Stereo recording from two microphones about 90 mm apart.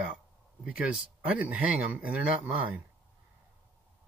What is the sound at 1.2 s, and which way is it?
A man's voice, 15° right (ahead or behind).